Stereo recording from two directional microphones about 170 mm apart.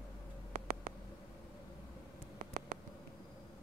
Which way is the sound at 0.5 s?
55° right (ahead or behind).